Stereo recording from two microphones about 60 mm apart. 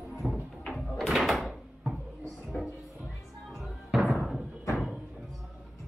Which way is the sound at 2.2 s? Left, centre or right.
Centre.